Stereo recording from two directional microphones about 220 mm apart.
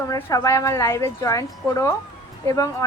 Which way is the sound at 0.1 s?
15° left (ahead or behind).